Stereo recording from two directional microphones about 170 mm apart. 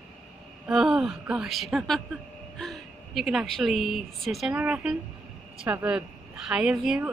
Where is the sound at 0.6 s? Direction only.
5° right (ahead or behind).